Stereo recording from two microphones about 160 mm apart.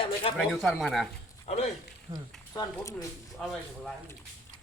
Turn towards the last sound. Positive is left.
turn(degrees=0)  # may be behind; listen again after turning